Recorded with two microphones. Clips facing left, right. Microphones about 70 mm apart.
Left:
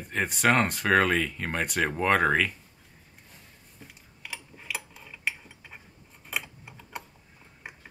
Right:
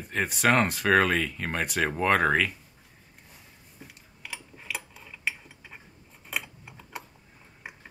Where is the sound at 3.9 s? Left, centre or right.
Centre.